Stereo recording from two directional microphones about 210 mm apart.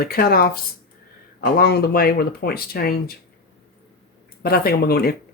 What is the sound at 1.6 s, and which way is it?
Speech, 50° left (ahead or behind).